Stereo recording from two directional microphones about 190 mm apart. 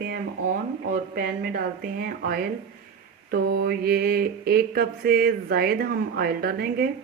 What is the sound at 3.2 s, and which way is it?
Mantra, 55° right (ahead or behind).